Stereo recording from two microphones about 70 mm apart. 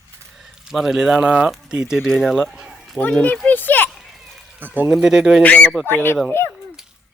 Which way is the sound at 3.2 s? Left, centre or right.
Left.